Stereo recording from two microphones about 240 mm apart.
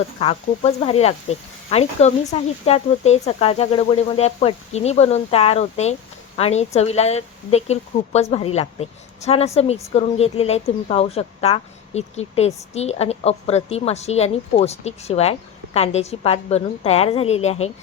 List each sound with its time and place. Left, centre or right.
0.2 s speech: left